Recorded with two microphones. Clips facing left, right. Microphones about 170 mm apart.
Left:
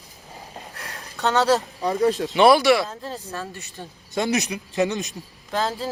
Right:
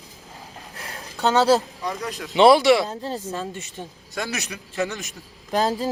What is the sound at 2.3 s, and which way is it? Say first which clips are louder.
Speech: right 3 dB; 20° right (ahead or behind).